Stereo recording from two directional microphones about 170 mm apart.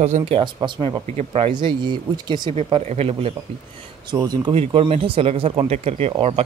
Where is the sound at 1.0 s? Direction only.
40° right (ahead or behind).